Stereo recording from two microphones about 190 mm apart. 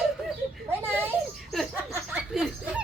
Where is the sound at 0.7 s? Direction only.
10° right (ahead or behind).